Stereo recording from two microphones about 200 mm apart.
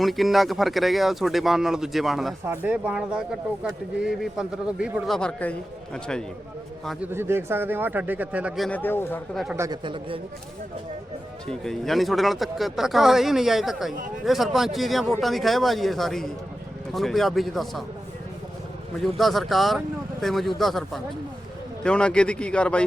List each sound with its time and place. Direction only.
0.0 s speech: centre (ahead or behind)
6.8 s a man's voice: 10° right (ahead or behind)
9.6 s speech: 20° right (ahead or behind)
11.4 s speech: centre (ahead or behind)
18.9 s speech: centre (ahead or behind)